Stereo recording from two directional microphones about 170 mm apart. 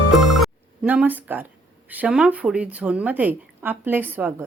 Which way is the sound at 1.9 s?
5° right (ahead or behind).